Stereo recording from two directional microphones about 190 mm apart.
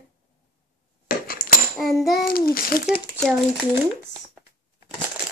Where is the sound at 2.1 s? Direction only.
50° left (ahead or behind).